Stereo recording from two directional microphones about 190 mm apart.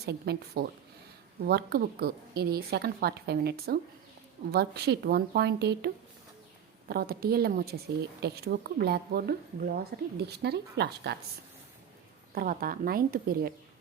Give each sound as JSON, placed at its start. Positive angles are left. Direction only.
{"t": 0.0, "sound": "speech", "side_deg": -60}
{"t": 12.3, "sound": "speech", "side_deg": -50}